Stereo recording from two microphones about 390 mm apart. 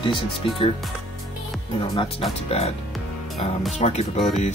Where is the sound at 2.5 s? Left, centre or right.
Centre.